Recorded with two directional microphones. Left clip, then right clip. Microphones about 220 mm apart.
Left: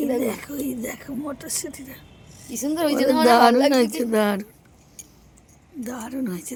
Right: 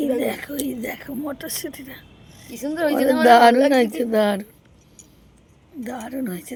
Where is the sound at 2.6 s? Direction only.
40° left (ahead or behind).